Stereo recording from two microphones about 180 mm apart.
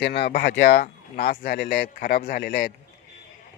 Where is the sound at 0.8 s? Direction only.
55° left (ahead or behind).